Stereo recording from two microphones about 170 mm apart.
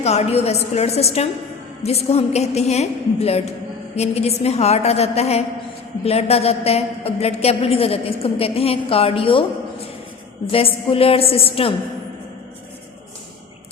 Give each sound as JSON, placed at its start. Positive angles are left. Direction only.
{"t": 0.0, "sound": "a woman's voice", "side_deg": 40}
{"t": 10.5, "sound": "a woman's voice", "side_deg": 35}